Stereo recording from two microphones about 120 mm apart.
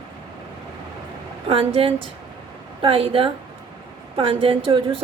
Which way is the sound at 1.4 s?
50° right (ahead or behind).